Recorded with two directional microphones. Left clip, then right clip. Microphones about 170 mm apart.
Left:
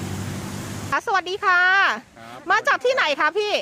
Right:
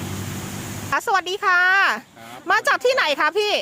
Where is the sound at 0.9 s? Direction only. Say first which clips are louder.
Right 1 dB; 5° right (ahead or behind).